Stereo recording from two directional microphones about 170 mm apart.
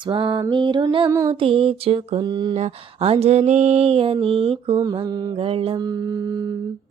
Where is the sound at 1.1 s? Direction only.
20° right (ahead or behind).